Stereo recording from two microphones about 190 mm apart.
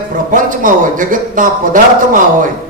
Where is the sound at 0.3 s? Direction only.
45° right (ahead or behind).